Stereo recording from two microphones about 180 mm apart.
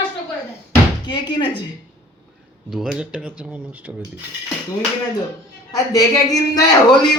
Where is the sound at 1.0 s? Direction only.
25° left (ahead or behind).